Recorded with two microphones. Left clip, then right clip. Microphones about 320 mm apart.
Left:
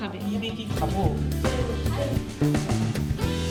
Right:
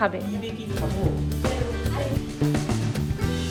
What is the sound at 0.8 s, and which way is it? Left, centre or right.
Music, centre.